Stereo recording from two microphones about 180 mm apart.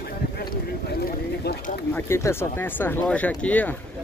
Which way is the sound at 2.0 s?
15° left (ahead or behind).